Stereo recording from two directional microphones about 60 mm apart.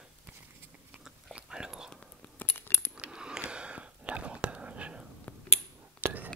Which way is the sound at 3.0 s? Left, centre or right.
Centre.